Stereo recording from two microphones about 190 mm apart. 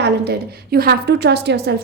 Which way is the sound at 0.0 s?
60° right (ahead or behind).